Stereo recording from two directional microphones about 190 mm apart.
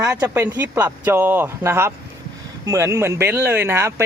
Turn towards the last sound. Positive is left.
turn(degrees=-15)  # may be behind; listen again after turning